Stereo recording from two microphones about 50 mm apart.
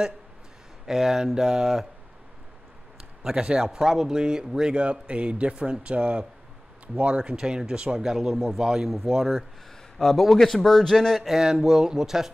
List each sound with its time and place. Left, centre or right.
0.8 s speech: centre
3.3 s a man's voice: centre
7.3 s a man's voice: centre
11.3 s speech: centre